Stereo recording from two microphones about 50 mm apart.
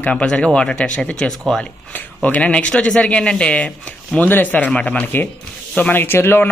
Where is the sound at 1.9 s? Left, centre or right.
Left.